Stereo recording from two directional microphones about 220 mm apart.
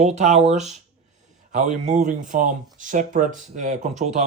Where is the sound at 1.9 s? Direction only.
35° right (ahead or behind).